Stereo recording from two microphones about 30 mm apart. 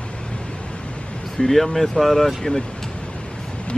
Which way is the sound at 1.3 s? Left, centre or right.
Centre.